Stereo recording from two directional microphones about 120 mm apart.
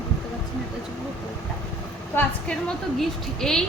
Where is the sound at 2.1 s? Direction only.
15° left (ahead or behind).